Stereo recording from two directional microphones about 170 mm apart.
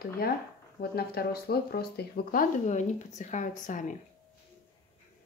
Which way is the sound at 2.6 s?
45° left (ahead or behind).